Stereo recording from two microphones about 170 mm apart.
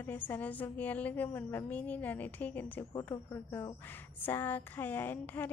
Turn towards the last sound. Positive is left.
turn(degrees=10)  # may be behind; listen again after turning